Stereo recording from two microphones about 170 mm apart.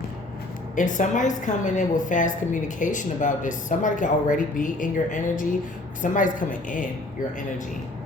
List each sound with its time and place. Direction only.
0.8 s a woman's voice: 50° left (ahead or behind)